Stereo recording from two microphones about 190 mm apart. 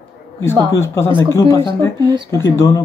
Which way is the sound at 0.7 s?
15° left (ahead or behind).